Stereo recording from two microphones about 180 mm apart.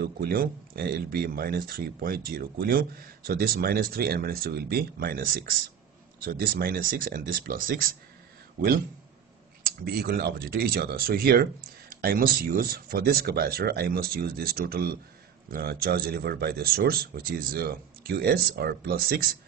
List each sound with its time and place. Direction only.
0.0 s speech: 55° right (ahead or behind)
9.8 s speech: 60° right (ahead or behind)